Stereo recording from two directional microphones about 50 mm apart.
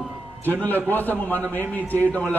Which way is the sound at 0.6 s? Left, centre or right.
Left.